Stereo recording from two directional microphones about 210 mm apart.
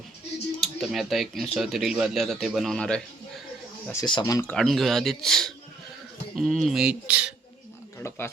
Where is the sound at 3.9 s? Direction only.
20° left (ahead or behind).